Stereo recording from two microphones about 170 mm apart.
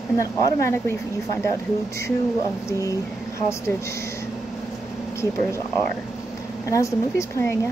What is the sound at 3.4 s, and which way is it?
Speech, 15° left (ahead or behind).